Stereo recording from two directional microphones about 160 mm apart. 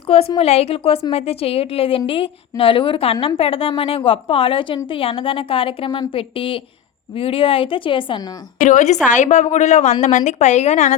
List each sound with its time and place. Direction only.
0.1 s a woman's voice: 40° left (ahead or behind)
8.6 s a woman's voice: 50° left (ahead or behind)